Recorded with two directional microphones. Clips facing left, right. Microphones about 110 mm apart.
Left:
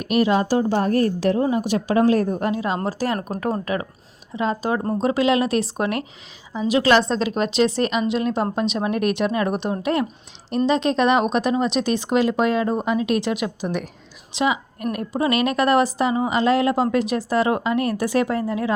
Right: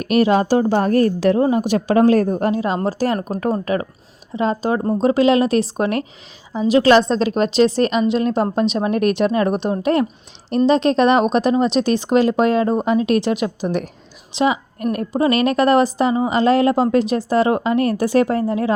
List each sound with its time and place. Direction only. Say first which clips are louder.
0.0 s speech: right 4 dB; 5° left (ahead or behind)
0.3 s a woman's voice: right 4 dB; 55° right (ahead or behind); by 18.7 s 35° right (ahead or behind)